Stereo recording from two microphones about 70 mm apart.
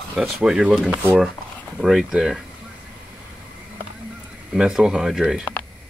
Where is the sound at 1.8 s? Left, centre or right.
Centre.